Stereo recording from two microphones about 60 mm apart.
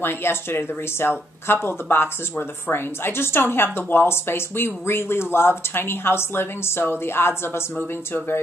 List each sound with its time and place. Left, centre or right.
0.0 s speech: left